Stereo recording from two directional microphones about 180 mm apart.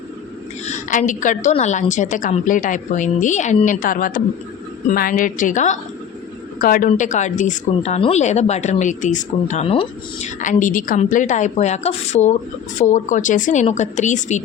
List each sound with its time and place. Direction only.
0.6 s a woman's voice: 40° left (ahead or behind)
10.4 s a woman's voice: 45° left (ahead or behind)